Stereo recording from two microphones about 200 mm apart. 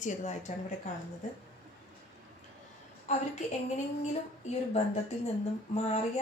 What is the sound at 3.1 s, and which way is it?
Speech, 35° left (ahead or behind).